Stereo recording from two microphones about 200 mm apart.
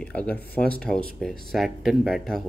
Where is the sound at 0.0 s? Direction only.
5° left (ahead or behind).